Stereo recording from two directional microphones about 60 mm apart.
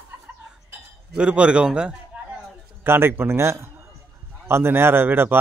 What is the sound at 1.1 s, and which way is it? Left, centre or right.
Speech, centre.